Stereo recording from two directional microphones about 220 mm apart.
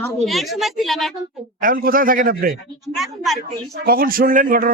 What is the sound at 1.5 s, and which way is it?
Speech, 40° right (ahead or behind).